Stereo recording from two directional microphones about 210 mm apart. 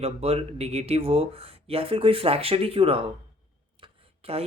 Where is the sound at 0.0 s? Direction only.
30° right (ahead or behind).